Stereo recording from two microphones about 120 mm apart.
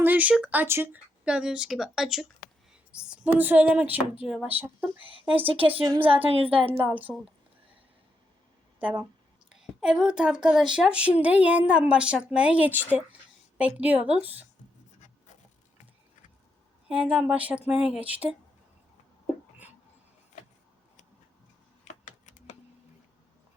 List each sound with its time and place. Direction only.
0.0 s speech: 15° right (ahead or behind)
1.2 s speech: 5° right (ahead or behind)
5.5 s a woman's voice: 50° right (ahead or behind)
6.7 s speech: 15° right (ahead or behind)
8.8 s a woman's voice: 15° right (ahead or behind)
16.9 s speech: 10° right (ahead or behind)
22.0 s a sound: 90° left